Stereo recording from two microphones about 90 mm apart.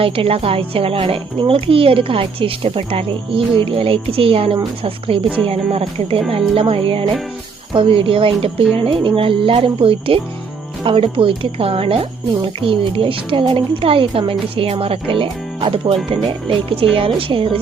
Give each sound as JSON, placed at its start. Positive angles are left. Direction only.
{"t": 0.0, "sound": "speech", "side_deg": -90}
{"t": 7.7, "sound": "a woman's voice", "side_deg": -70}
{"t": 13.5, "sound": "a woman's voice", "side_deg": -85}